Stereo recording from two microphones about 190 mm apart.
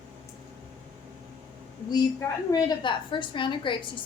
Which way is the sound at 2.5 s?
25° left (ahead or behind).